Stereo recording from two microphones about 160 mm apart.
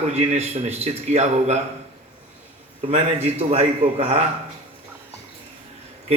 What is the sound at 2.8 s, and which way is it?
A man's voice, 40° right (ahead or behind).